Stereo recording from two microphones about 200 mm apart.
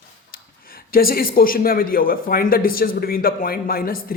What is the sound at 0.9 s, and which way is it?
A man's voice, 45° left (ahead or behind).